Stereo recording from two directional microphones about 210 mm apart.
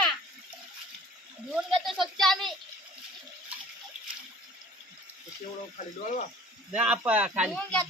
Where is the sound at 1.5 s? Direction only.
Centre (ahead or behind).